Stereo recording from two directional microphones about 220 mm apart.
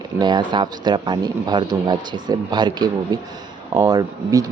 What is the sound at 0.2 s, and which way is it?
Speech, 20° right (ahead or behind).